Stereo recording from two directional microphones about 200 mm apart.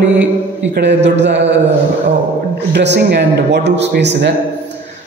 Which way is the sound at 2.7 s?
60° right (ahead or behind).